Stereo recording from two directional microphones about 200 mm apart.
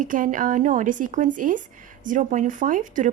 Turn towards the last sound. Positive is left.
turn(degrees=-40)  # may be behind; listen again after turning